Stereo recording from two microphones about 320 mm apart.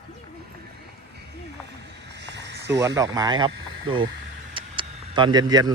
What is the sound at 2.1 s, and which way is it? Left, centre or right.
Snake, right.